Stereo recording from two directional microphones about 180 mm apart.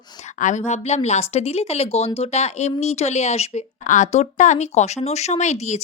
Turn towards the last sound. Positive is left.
turn(degrees=40)  # may be behind; listen again after turning